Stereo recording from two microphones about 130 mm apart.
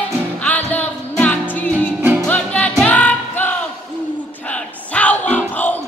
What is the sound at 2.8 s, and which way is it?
Choir, 10° left (ahead or behind).